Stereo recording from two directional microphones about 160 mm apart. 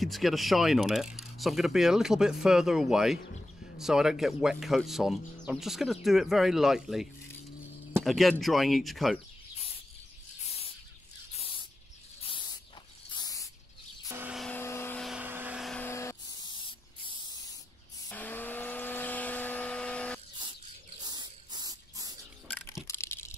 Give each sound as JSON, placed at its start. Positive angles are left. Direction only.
{"t": 0.0, "sound": "speech", "side_deg": 0}
{"t": 11.3, "sound": "spray", "side_deg": 35}
{"t": 12.3, "sound": "cricket", "side_deg": 30}
{"t": 13.1, "sound": "spray", "side_deg": 25}
{"t": 14.0, "sound": "vehicle", "side_deg": -15}
{"t": 14.5, "sound": "vehicle", "side_deg": 15}
{"t": 15.0, "sound": "vehicle", "side_deg": 0}
{"t": 15.8, "sound": "spray", "side_deg": 15}
{"t": 18.1, "sound": "vacuum cleaner", "side_deg": 10}
{"t": 21.0, "sound": "a sound", "side_deg": -25}
{"t": 22.8, "sound": "a sound", "side_deg": 15}